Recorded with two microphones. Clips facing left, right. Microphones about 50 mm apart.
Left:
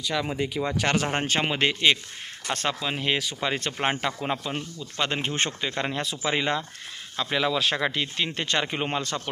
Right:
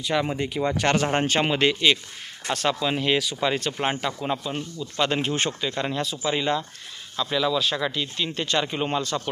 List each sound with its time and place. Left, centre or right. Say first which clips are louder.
0.0 s speech: right 3 dB; centre
1.3 s speech: right 3 dB; centre
2.8 s speech: right 4 dB; centre; by 4.5 s left
4.5 s speech: right 3 dB; centre
5.3 s speech: right 2 dB; left
6.2 s speech: right 1 dB; left